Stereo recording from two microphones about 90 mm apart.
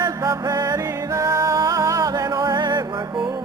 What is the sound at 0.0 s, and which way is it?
Music, 45° right (ahead or behind).